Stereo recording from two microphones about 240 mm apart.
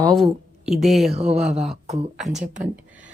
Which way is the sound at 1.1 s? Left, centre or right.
Right.